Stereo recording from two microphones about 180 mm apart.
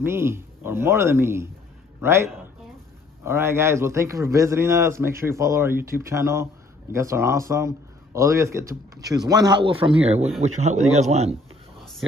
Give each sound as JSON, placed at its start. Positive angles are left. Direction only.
{"t": 0.0, "sound": "a man's voice", "side_deg": -15}
{"t": 10.4, "sound": "speech", "side_deg": -40}